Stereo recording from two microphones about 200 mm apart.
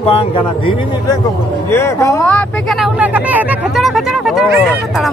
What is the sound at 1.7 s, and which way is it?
Speech, 15° left (ahead or behind).